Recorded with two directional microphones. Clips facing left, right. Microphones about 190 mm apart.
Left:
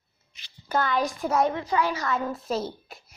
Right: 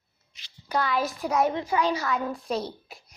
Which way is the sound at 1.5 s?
15° right (ahead or behind).